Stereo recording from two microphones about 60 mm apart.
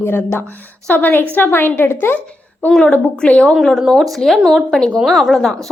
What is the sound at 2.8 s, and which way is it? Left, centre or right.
Speech, left.